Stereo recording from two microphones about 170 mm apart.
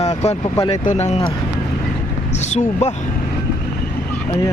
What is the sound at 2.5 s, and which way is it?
Speech, 45° left (ahead or behind).